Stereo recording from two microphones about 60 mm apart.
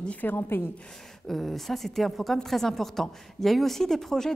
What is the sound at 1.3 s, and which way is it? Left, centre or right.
A woman's voice, centre.